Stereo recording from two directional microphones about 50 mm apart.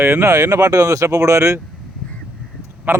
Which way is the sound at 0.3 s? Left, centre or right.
Right.